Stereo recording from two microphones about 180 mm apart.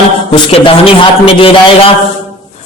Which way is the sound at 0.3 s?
30° left (ahead or behind).